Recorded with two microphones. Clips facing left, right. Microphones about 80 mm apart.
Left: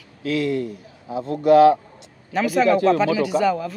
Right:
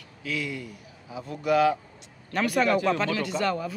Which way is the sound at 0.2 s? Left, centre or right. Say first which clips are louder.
Left 10 dB; left.